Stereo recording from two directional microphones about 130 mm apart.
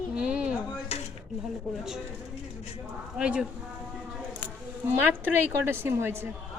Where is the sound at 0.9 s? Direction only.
50° left (ahead or behind).